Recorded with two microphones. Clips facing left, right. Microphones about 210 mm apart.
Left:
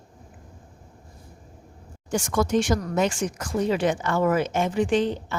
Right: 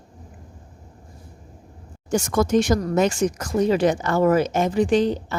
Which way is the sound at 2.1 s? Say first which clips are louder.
Right 4 dB; 40° right (ahead or behind).